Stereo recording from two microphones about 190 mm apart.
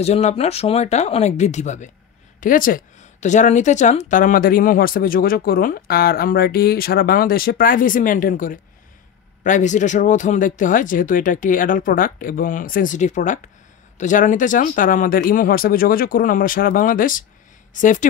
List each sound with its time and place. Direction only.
0.0 s speech: 35° left (ahead or behind)